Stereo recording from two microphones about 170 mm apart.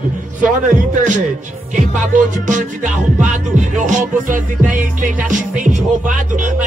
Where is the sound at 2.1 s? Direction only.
45° right (ahead or behind).